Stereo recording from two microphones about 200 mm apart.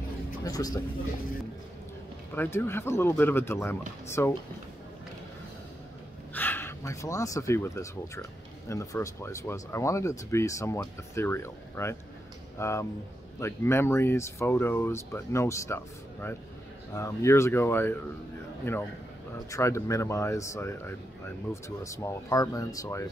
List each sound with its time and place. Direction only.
0.4 s speech: 20° left (ahead or behind)
2.3 s speech: 10° left (ahead or behind)
6.3 s speech: 10° left (ahead or behind)
19.5 s speech: 15° left (ahead or behind)